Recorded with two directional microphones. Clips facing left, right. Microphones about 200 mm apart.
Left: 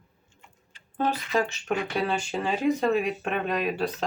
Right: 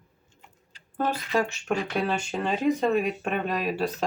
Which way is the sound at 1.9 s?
Centre (ahead or behind).